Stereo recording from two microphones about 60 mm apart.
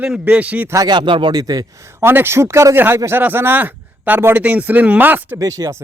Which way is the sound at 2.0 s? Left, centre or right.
Right.